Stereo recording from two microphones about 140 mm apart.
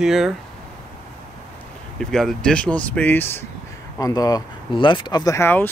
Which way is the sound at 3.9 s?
25° left (ahead or behind).